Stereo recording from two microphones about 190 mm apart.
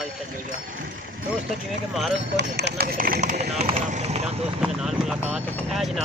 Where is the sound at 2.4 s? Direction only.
60° right (ahead or behind).